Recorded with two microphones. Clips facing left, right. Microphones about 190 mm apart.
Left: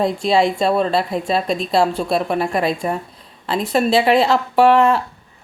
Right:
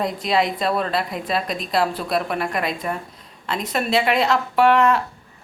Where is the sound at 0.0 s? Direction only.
30° left (ahead or behind).